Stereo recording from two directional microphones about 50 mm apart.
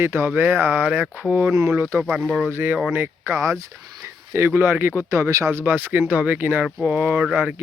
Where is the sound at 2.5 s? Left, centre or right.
Right.